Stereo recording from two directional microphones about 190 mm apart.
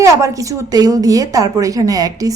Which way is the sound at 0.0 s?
15° right (ahead or behind).